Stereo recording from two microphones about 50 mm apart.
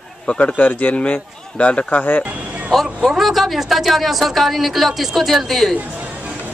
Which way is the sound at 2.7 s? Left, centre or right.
Centre.